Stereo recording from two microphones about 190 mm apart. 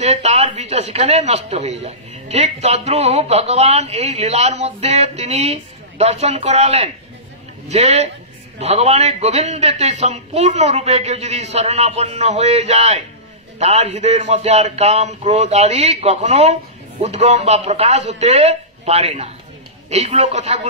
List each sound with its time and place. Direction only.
0.0 s a man's voice: 35° right (ahead or behind)